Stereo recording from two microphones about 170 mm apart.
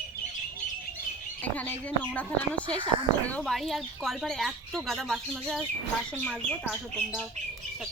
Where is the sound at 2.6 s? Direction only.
30° right (ahead or behind).